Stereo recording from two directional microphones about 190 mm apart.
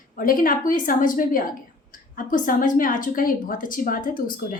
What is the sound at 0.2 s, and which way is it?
Speech, 45° left (ahead or behind).